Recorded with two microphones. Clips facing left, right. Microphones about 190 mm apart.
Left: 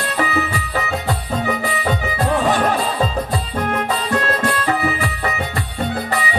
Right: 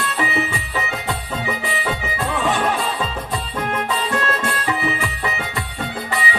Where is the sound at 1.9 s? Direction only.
40° left (ahead or behind).